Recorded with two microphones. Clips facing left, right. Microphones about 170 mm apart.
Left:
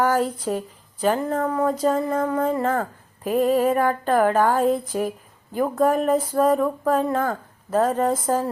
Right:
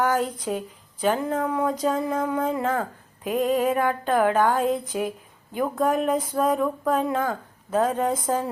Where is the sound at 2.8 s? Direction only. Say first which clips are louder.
Left 2 dB; 5° left (ahead or behind).